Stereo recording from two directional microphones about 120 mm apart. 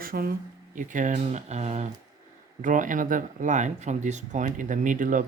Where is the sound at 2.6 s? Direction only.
90° right.